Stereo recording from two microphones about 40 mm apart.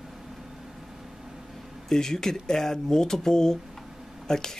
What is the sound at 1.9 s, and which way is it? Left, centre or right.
Speech, centre.